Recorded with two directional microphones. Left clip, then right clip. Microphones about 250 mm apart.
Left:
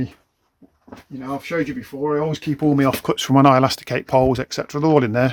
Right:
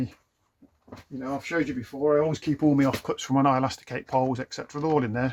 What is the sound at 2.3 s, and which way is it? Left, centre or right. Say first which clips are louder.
Speech: left 4 dB; left.